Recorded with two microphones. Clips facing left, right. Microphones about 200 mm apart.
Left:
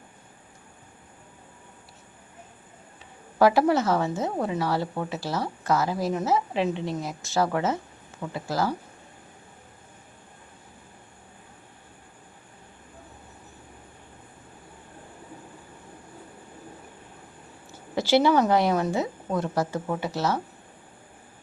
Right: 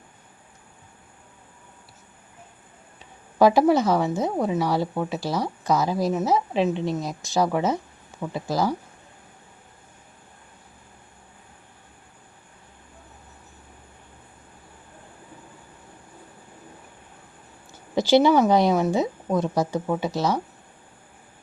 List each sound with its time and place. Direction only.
3.3 s a woman's voice: 15° right (ahead or behind)
17.9 s a woman's voice: 15° right (ahead or behind)